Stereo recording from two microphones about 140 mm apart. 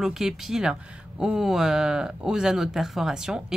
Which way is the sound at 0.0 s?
5° right (ahead or behind).